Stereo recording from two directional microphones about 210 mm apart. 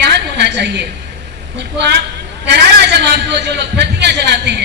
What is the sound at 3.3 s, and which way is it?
A woman's voice, 55° right (ahead or behind).